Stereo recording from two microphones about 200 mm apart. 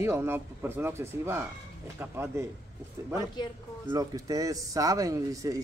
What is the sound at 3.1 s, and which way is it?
Speech, 20° left (ahead or behind).